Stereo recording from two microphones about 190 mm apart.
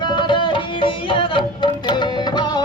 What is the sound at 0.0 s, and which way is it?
Music, 25° left (ahead or behind).